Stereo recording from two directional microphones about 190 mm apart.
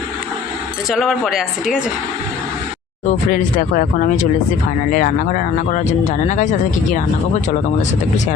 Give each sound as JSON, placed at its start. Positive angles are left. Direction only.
{"t": 0.9, "sound": "speech", "side_deg": 0}
{"t": 3.3, "sound": "speech", "side_deg": 45}